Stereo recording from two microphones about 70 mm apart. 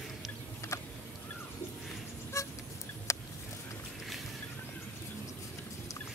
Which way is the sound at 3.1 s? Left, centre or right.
Left.